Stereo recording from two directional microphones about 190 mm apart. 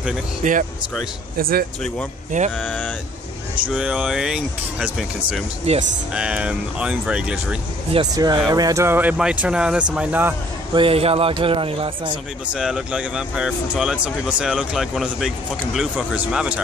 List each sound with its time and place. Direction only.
0.4 s speech: 40° right (ahead or behind)
2.5 s speech: 5° left (ahead or behind)
3.6 s speech: 5° right (ahead or behind)
5.7 s speech: 35° right (ahead or behind)
6.1 s speech: 5° right (ahead or behind)
7.9 s speech: 20° right (ahead or behind)
10.7 s speech: 30° right (ahead or behind)
12.5 s speech: 5° right (ahead or behind)